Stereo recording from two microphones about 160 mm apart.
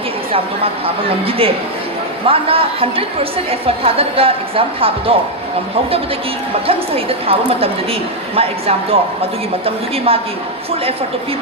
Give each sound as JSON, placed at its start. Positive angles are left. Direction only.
{"t": 1.2, "sound": "a woman's voice", "side_deg": -35}
{"t": 6.7, "sound": "a woman's voice", "side_deg": -35}